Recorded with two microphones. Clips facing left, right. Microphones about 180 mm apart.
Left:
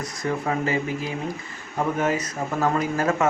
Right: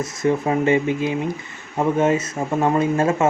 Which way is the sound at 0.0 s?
25° right (ahead or behind).